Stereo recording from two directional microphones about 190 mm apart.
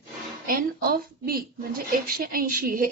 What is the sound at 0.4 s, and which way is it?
A woman's voice, 50° right (ahead or behind).